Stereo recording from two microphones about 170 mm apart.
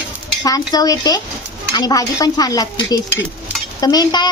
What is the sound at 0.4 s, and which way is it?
Speech, 20° left (ahead or behind).